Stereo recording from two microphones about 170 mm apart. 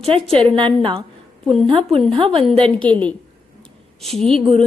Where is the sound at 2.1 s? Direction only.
30° right (ahead or behind).